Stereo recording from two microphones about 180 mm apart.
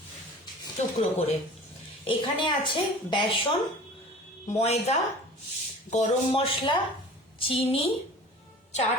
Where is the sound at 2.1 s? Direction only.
25° left (ahead or behind).